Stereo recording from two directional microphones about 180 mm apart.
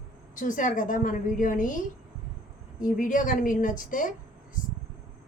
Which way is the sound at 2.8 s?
45° left (ahead or behind).